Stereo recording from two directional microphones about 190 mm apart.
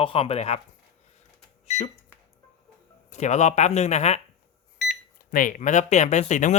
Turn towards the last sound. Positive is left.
turn(degrees=40)  # may be behind; listen again after turning